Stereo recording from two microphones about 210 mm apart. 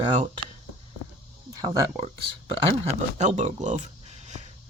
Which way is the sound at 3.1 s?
35° right (ahead or behind).